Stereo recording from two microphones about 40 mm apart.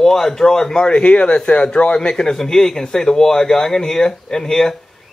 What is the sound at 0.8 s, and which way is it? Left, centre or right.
A man's voice, left.